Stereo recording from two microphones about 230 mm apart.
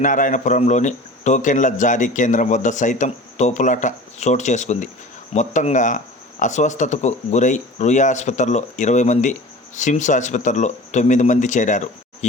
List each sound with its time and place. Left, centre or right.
0.0 s a man's voice: left